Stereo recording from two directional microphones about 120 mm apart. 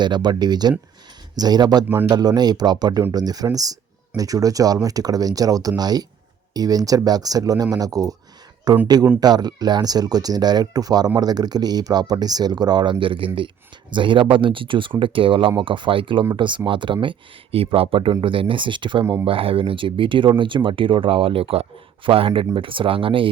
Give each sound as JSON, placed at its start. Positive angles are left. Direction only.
{"t": 0.0, "sound": "speech", "side_deg": -40}